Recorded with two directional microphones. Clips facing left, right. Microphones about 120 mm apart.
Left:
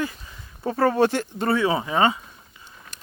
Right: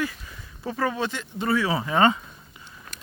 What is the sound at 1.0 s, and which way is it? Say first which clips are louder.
Speech: left 9 dB; 55° left (ahead or behind).